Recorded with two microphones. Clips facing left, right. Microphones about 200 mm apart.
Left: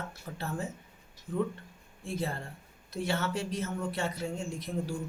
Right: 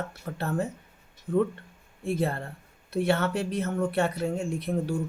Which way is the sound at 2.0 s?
60° right (ahead or behind).